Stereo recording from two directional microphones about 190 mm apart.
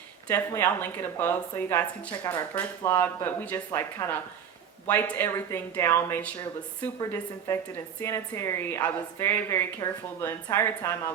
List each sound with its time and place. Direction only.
0.3 s a woman's voice: 10° left (ahead or behind)